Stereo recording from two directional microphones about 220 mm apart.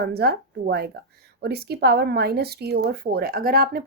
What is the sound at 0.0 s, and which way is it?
Speech, 45° right (ahead or behind).